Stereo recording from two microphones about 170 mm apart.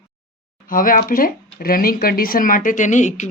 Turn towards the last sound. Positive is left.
turn(degrees=45)  # may be behind; listen again after turning